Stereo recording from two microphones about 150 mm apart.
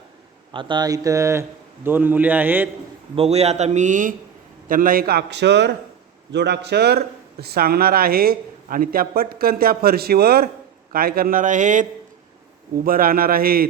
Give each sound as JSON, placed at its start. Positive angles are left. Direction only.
{"t": 0.5, "sound": "a man's voice", "side_deg": -30}
{"t": 3.2, "sound": "speech", "side_deg": -45}
{"t": 4.7, "sound": "a man's voice", "side_deg": -70}
{"t": 10.9, "sound": "a man's voice", "side_deg": -75}
{"t": 12.8, "sound": "a man's voice", "side_deg": -70}